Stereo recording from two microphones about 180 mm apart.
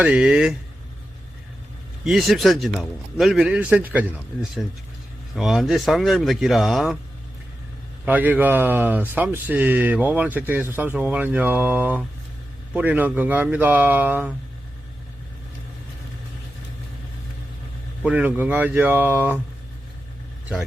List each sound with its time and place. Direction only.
0.0 s a man's voice: 5° right (ahead or behind)
2.0 s a man's voice: centre (ahead or behind)
5.3 s a man's voice: centre (ahead or behind)
8.0 s speech: 10° right (ahead or behind)
18.0 s speech: 10° right (ahead or behind)